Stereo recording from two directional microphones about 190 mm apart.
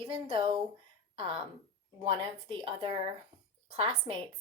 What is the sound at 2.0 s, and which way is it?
A woman's voice, 25° right (ahead or behind).